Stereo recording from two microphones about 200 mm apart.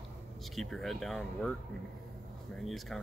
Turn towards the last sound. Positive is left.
turn(degrees=0)  # may be behind; listen again after turning